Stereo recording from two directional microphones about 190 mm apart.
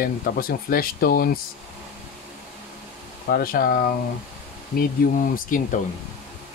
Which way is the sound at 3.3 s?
50° left (ahead or behind).